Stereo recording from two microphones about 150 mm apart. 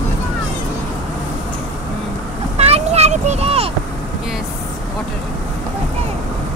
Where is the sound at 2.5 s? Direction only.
45° right (ahead or behind).